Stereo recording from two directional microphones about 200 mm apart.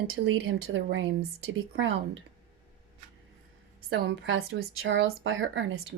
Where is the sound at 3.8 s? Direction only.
65° right (ahead or behind).